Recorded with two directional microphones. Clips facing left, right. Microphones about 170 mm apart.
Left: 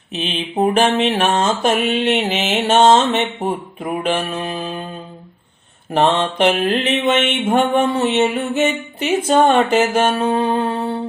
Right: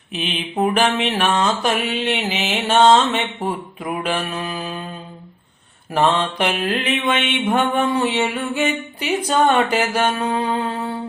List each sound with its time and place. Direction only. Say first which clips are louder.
0.2 s mantra: left 2 dB; 25° left (ahead or behind)
5.9 s mantra: left 2 dB; 25° left (ahead or behind)
10.4 s music: left 4 dB; 30° left (ahead or behind)